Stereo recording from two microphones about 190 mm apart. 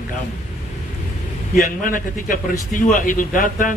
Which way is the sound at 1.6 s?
45° left (ahead or behind).